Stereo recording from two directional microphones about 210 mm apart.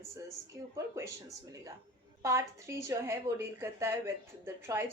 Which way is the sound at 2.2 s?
15° right (ahead or behind).